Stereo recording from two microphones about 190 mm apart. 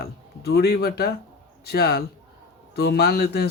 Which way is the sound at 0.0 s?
55° left (ahead or behind).